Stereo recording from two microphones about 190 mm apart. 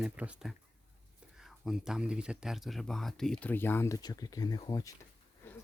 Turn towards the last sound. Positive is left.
turn(degrees=20)  # may be behind; listen again after turning